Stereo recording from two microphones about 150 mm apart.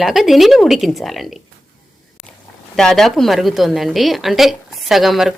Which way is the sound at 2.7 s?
5° left (ahead or behind).